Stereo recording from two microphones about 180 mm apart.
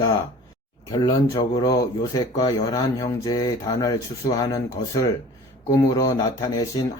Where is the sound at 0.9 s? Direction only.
20° left (ahead or behind).